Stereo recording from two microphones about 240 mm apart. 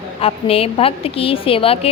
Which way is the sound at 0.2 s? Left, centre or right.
Left.